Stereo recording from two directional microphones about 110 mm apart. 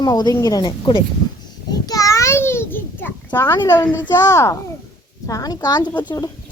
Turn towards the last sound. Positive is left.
turn(degrees=40)  # may be behind; listen again after turning